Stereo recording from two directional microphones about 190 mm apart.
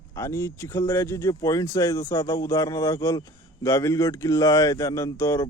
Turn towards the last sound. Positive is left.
turn(degrees=15)  # may be behind; listen again after turning